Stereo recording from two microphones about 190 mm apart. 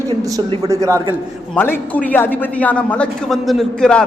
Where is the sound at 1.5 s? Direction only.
10° left (ahead or behind).